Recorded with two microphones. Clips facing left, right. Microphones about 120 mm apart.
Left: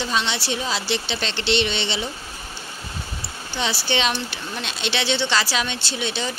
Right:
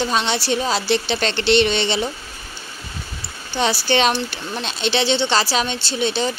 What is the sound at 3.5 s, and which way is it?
Speech, 45° right (ahead or behind).